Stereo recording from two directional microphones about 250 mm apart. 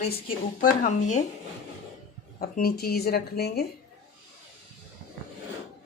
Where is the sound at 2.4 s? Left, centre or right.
Left.